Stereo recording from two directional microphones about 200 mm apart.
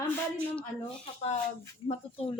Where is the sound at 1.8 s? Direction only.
30° left (ahead or behind).